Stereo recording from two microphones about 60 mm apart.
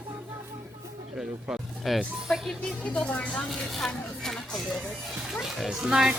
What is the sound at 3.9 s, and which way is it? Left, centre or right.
Speech, centre.